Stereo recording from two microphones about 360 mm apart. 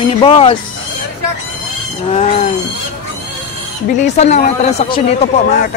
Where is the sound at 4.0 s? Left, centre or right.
Centre.